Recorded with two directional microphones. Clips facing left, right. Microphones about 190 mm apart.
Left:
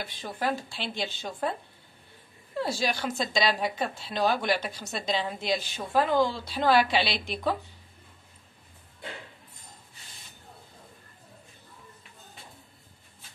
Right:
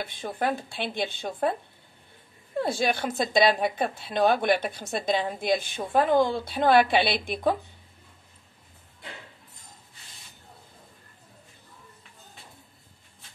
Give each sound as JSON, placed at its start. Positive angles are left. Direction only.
{"t": 0.0, "sound": "speech", "side_deg": -50}
{"t": 2.6, "sound": "speech", "side_deg": -55}